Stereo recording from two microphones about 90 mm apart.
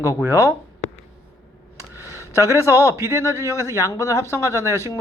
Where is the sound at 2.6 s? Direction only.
30° right (ahead or behind).